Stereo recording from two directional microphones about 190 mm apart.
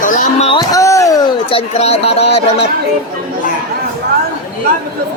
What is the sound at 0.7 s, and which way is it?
Speech, 15° left (ahead or behind).